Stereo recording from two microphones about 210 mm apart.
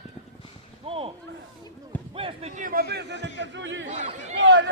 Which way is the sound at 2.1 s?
25° right (ahead or behind).